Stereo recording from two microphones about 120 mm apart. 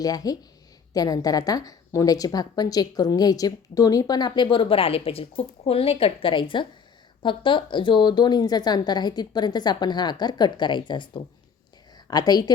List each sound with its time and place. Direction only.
0.0 s a woman's voice: 30° left (ahead or behind)